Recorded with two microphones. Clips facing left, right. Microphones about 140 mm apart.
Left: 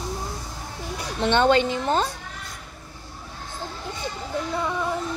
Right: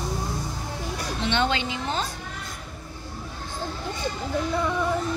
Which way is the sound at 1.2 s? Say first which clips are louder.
Left 7 dB; 50° left (ahead or behind).